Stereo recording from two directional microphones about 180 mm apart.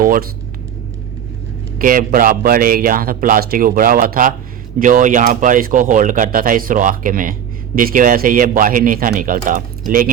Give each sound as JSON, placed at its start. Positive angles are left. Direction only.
{"t": 0.0, "sound": "speech", "side_deg": -50}
{"t": 1.8, "sound": "speech", "side_deg": -50}